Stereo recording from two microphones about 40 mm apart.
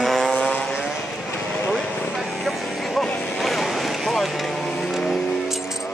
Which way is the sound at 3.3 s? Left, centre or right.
Centre.